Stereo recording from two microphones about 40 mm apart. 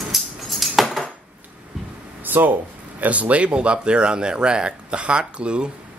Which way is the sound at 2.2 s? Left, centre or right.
Right.